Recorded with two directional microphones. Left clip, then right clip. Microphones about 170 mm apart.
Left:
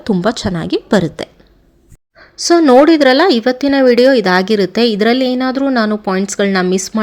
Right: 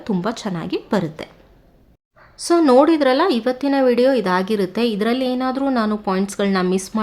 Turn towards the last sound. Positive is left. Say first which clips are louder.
# left 6 dB
turn(degrees=25)  # may be behind; listen again after turning